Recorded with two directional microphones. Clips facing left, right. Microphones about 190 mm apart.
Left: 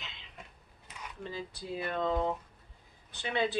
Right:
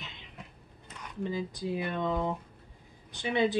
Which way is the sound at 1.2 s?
15° right (ahead or behind).